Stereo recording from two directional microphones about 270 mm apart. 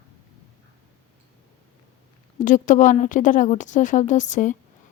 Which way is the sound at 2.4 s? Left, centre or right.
Left.